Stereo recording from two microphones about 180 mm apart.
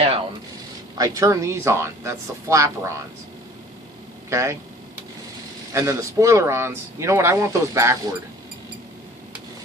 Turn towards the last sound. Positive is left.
turn(degrees=-15)  # may be behind; listen again after turning